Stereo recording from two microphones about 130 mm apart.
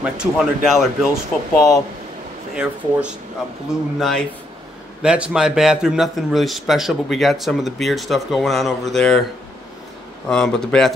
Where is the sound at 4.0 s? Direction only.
5° left (ahead or behind).